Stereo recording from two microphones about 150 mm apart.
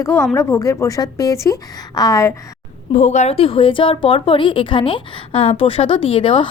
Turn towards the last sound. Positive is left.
turn(degrees=35)  # may be behind; listen again after turning